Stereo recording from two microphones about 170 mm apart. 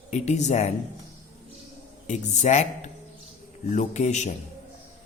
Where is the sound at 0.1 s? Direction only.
45° left (ahead or behind).